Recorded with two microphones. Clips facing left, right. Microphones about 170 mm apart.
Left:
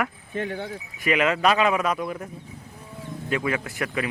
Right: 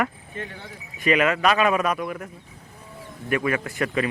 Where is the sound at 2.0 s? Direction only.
25° left (ahead or behind).